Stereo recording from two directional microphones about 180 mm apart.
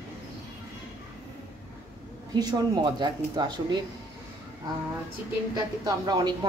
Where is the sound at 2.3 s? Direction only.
20° right (ahead or behind).